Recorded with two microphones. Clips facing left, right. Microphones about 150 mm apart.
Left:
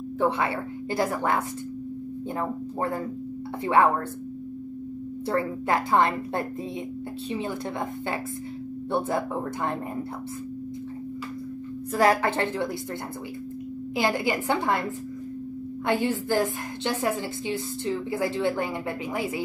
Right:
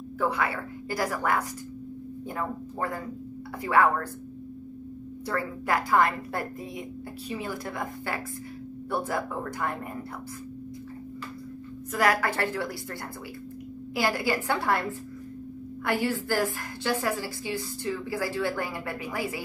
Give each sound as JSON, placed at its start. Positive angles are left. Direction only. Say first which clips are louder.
{"t": 0.2, "sound": "a woman's voice", "louder": "left 3 dB", "side_deg": 25}
{"t": 5.3, "sound": "a woman's voice", "louder": "left 3 dB", "side_deg": 25}
{"t": 8.9, "sound": "a woman's voice", "louder": "left 3 dB", "side_deg": 25}
{"t": 11.9, "sound": "a woman's voice", "louder": "left 3 dB", "side_deg": 30}
{"t": 13.9, "sound": "a woman's voice", "louder": "left 2 dB", "side_deg": 20}
{"t": 15.8, "sound": "a woman's voice", "louder": "left 2 dB", "side_deg": 20}